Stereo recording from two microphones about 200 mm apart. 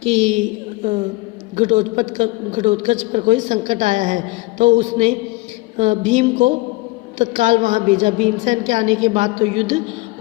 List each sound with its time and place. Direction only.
0.0 s a man's voice: 35° right (ahead or behind)
1.5 s a man's voice: 35° right (ahead or behind)